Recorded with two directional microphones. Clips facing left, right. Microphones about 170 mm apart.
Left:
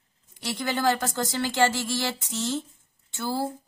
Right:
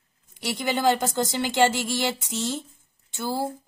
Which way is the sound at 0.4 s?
15° right (ahead or behind).